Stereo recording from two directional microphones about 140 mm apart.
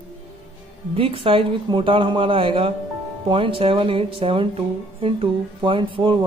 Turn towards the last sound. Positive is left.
turn(degrees=-40)  # may be behind; listen again after turning